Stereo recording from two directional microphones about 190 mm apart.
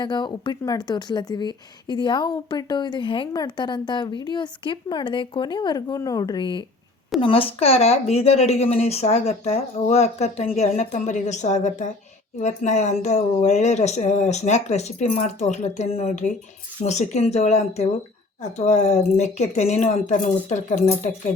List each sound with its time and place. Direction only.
0.0 s speech: 25° left (ahead or behind); by 21.1 s 40° left (ahead or behind)